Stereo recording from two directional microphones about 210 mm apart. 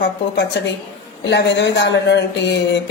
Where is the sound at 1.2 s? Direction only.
55° left (ahead or behind).